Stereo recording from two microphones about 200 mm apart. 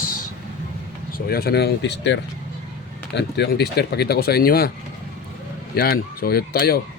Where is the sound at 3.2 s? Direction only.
55° left (ahead or behind).